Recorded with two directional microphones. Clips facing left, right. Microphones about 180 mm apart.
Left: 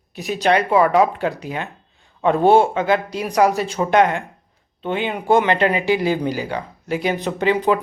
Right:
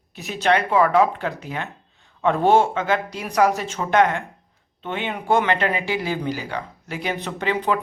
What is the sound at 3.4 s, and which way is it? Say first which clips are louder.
Speech: left 2 dB; 10° left (ahead or behind).